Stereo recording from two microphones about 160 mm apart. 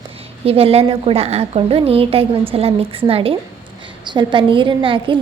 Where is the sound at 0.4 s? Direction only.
35° right (ahead or behind).